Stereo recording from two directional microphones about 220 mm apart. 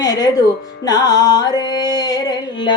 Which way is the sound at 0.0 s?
15° left (ahead or behind).